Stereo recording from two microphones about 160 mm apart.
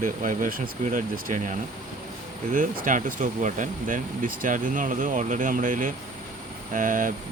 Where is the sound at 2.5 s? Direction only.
55° right (ahead or behind).